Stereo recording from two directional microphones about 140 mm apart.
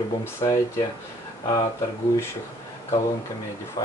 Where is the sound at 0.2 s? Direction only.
25° left (ahead or behind).